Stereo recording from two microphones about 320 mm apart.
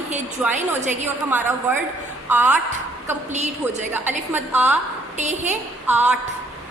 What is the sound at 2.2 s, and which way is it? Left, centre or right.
Speech, centre.